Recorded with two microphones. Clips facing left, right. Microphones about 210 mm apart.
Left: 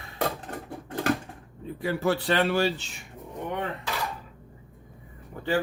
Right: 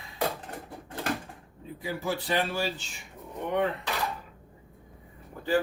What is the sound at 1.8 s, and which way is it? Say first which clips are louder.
Speech: left 6 dB; 65° left (ahead or behind).